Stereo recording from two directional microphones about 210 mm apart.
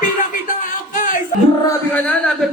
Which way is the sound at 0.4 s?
40° left (ahead or behind).